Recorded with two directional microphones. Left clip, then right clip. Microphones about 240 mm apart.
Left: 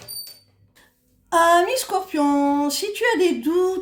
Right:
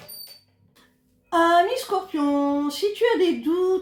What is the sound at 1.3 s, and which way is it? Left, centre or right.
Speech, left.